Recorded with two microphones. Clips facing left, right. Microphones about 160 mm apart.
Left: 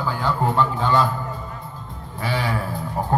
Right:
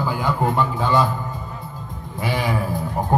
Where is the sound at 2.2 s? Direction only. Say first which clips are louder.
Right 2 dB; 15° right (ahead or behind).